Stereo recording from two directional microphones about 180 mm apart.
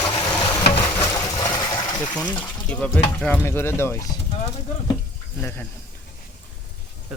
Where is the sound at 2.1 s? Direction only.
5° left (ahead or behind).